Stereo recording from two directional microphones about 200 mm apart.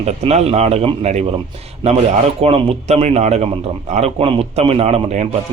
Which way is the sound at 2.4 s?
30° right (ahead or behind).